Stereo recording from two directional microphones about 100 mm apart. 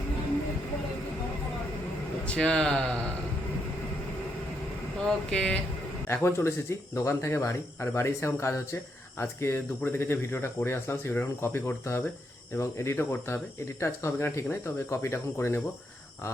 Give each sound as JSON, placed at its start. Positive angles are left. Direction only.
{"t": 2.2, "sound": "speech", "side_deg": 10}
{"t": 5.0, "sound": "speech", "side_deg": 10}
{"t": 6.1, "sound": "speech", "side_deg": 25}